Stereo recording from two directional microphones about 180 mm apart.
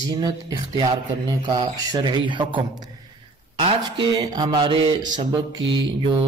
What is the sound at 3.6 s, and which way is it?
Speech, 25° right (ahead or behind).